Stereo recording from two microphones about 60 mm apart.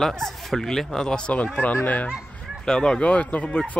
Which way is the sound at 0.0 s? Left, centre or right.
Centre.